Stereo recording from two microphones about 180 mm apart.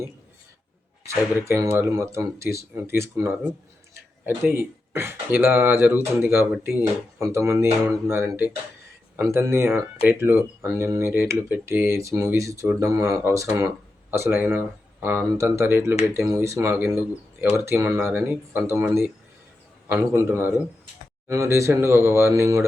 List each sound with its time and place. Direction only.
1.5 s speech: 10° right (ahead or behind)
4.4 s speech: 15° right (ahead or behind)